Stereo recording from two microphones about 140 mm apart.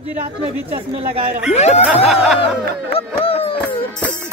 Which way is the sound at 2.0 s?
5° right (ahead or behind).